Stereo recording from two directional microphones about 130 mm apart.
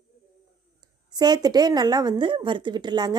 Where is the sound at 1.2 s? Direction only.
30° right (ahead or behind).